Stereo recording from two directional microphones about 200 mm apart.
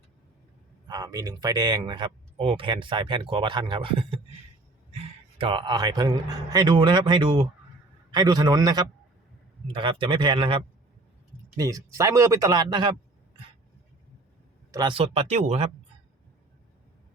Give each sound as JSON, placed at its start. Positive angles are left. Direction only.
{"t": 0.9, "sound": "speech", "side_deg": -20}
{"t": 14.7, "sound": "speech", "side_deg": -20}